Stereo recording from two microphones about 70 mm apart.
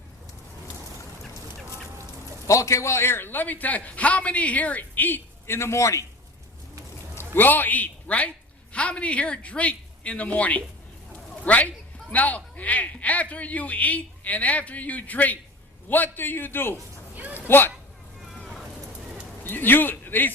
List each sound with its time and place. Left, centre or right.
2.5 s a man's voice: left
7.3 s a man's voice: left
18.3 s vehicle: centre
19.5 s speech: left